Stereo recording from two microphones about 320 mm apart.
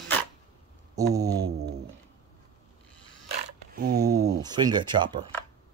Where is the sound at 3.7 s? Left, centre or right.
Right.